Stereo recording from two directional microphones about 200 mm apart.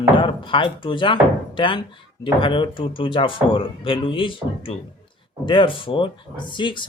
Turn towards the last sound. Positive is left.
turn(degrees=25)  # may be behind; listen again after turning